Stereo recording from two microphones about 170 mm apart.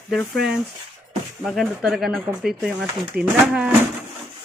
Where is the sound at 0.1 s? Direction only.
Centre (ahead or behind).